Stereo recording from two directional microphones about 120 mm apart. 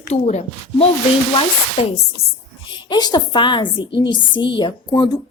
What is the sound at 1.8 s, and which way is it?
Speech, 50° left (ahead or behind).